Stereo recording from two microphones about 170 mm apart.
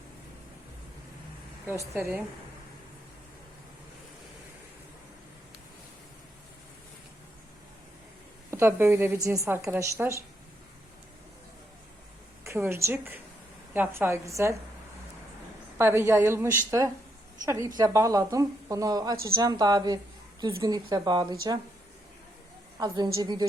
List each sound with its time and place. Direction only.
1.6 s a woman's voice: 15° right (ahead or behind)
8.4 s a woman's voice: 15° right (ahead or behind)
12.5 s a woman's voice: 15° right (ahead or behind)
15.8 s a woman's voice: 15° right (ahead or behind)
23.1 s speech: 25° right (ahead or behind)